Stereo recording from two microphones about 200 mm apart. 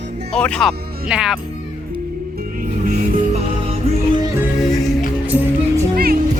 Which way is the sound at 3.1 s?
30° right (ahead or behind).